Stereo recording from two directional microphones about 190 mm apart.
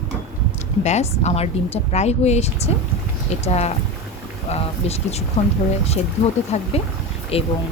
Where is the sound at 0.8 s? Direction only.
35° left (ahead or behind).